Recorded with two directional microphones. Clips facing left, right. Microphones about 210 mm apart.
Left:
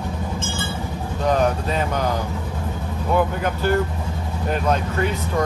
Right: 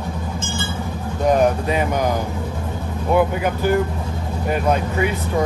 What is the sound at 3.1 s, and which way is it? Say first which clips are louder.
Speech: right 3 dB; 10° right (ahead or behind).